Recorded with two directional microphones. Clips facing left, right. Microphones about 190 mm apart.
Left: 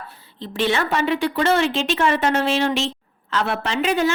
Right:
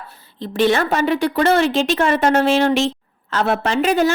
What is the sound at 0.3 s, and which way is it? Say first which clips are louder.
A woman's voice: right 5 dB; 45° right (ahead or behind).